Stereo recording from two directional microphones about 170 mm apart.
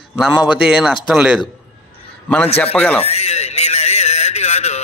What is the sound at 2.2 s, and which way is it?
Speech, 10° left (ahead or behind).